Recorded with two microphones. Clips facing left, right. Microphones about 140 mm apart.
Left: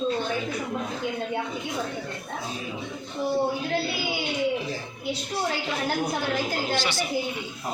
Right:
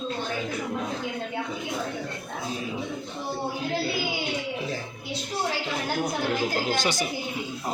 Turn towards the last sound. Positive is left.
turn(degrees=-45)  # may be behind; listen again after turning